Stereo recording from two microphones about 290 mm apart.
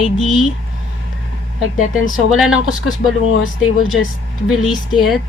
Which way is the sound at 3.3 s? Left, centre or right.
Left.